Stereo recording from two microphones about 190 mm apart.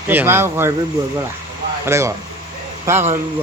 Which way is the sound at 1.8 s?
15° right (ahead or behind).